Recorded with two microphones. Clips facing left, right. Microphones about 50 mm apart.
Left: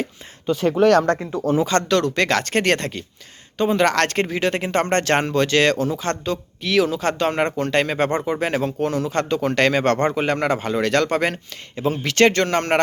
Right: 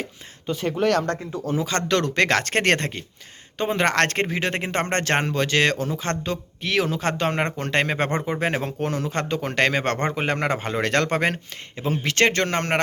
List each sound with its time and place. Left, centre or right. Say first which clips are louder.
0.4 s speech: left 6 dB; left
1.9 s speech: left 2 dB; right